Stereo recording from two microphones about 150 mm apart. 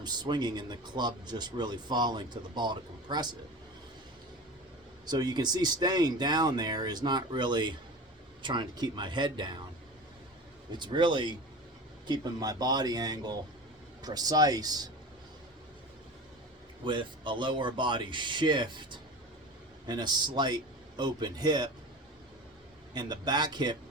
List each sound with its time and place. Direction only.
0.0 s speech: 30° right (ahead or behind)
5.0 s speech: 25° right (ahead or behind)
10.7 s speech: 30° right (ahead or behind)
16.8 s speech: 35° right (ahead or behind)
23.0 s speech: 30° right (ahead or behind)